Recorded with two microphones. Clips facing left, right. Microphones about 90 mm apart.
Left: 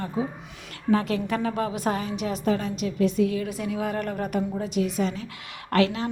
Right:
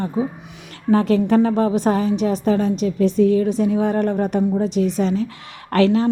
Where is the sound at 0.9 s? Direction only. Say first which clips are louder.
Right 8 dB; 35° right (ahead or behind).